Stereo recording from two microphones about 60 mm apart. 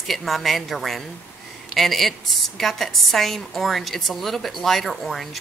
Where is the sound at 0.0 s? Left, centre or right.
Centre.